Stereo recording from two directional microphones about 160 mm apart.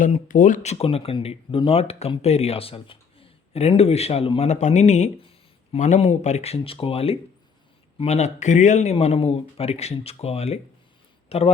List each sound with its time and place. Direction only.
0.0 s speech: 55° left (ahead or behind)